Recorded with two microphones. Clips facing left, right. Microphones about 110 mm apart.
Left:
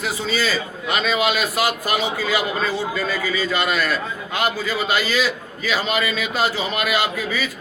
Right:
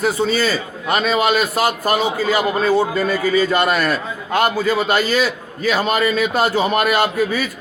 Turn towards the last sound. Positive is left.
turn(degrees=-50)  # may be behind; listen again after turning